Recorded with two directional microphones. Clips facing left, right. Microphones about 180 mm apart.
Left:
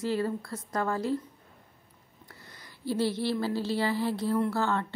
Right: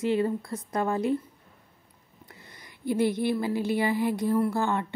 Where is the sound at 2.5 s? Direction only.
20° right (ahead or behind).